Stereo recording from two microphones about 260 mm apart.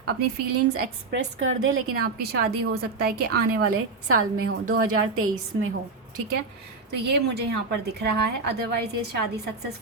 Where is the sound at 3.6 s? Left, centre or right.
Right.